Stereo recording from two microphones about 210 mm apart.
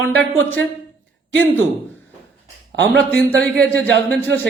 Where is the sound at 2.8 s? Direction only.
55° right (ahead or behind).